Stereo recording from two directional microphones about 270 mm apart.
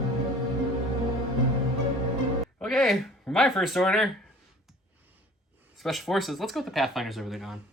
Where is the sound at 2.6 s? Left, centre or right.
Centre.